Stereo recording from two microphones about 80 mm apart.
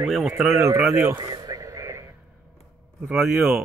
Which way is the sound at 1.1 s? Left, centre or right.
Right.